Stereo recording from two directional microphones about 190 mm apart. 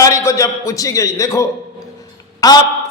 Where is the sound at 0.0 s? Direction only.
15° left (ahead or behind).